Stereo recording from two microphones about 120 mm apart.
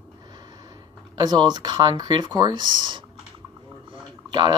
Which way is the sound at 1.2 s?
35° right (ahead or behind).